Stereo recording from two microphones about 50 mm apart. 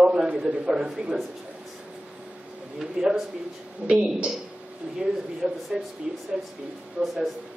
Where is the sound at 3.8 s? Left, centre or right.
Right.